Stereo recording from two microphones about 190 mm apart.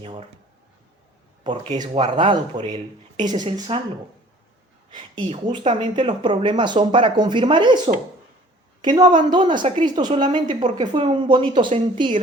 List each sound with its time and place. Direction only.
0.0 s speech: 30° right (ahead or behind)
1.5 s speech: 25° right (ahead or behind)
4.9 s speech: 25° right (ahead or behind)
8.8 s a woman's voice: 25° right (ahead or behind)